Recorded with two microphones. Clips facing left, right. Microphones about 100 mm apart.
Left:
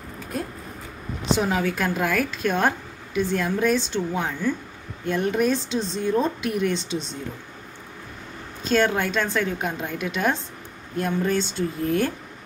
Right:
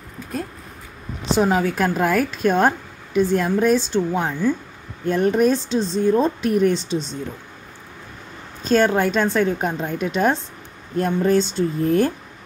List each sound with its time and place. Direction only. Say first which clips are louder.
1.4 s speech: right 8 dB; 35° right (ahead or behind)
8.6 s speech: right 4 dB; 35° right (ahead or behind)